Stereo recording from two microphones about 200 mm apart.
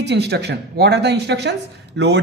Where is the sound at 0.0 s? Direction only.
55° right (ahead or behind).